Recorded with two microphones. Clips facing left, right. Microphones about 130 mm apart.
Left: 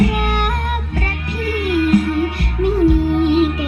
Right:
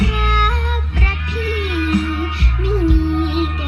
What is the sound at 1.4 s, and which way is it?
Music, 50° left (ahead or behind).